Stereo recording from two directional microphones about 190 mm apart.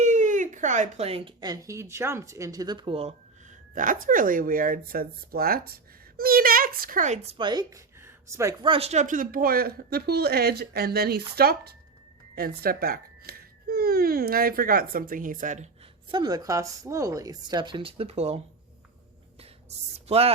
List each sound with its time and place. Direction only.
0.0 s speech: 40° right (ahead or behind)
3.8 s speech: 45° right (ahead or behind); by 8.7 s 15° right (ahead or behind)
8.7 s speech: 35° right (ahead or behind)
16.1 s speech: 20° right (ahead or behind)
19.7 s speech: 35° right (ahead or behind)